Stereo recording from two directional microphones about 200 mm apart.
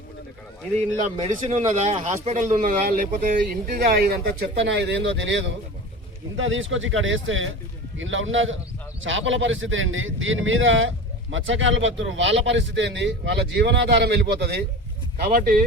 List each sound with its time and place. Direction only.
1.0 s speech: 35° right (ahead or behind)